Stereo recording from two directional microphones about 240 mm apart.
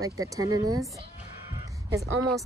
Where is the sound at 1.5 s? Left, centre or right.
Centre.